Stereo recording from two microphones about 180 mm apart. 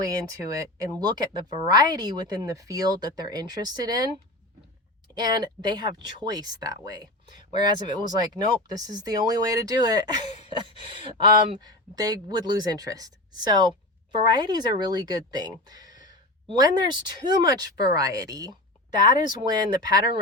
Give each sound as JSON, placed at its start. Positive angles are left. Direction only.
{"t": 0.0, "sound": "speech", "side_deg": -20}
{"t": 10.2, "sound": "gasp", "side_deg": 40}
{"t": 11.0, "sound": "speech", "side_deg": -25}